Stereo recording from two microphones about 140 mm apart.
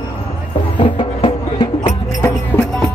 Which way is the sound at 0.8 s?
35° left (ahead or behind).